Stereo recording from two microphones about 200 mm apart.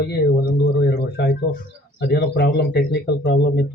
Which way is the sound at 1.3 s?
50° left (ahead or behind).